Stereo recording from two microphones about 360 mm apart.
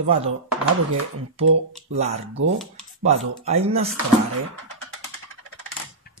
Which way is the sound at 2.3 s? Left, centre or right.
Right.